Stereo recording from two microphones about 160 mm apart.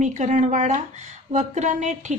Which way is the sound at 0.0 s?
50° right (ahead or behind).